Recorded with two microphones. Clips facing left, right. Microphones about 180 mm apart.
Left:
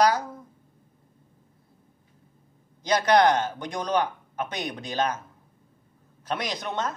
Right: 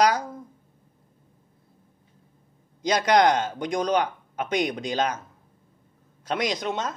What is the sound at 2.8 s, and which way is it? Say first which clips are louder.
Speech: even; 15° right (ahead or behind).